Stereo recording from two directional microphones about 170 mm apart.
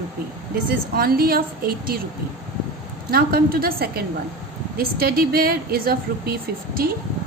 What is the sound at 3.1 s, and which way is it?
A woman's voice, 60° right (ahead or behind).